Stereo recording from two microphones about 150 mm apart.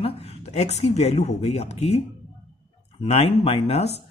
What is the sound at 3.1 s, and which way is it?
Speech, 45° left (ahead or behind).